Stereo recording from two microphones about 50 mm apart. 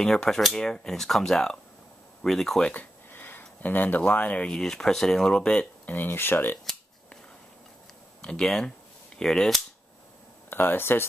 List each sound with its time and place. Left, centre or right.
0.0 s speech: centre
2.7 s a sound: left
4.0 s speech: left
4.6 s speech: centre
5.5 s speech: left
5.9 s speech: left
8.2 s speech: centre
8.5 s speech: centre
10.5 s speech: left